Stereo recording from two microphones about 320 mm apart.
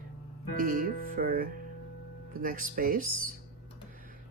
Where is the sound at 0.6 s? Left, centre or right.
Right.